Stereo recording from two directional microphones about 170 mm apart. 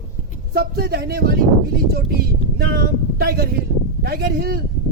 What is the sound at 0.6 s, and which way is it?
Speech, 70° right (ahead or behind).